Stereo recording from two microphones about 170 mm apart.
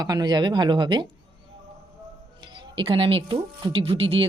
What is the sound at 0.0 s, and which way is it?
Speech, 25° right (ahead or behind).